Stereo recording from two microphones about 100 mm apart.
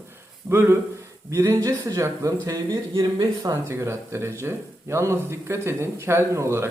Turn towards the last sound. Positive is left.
turn(degrees=-25)  # may be behind; listen again after turning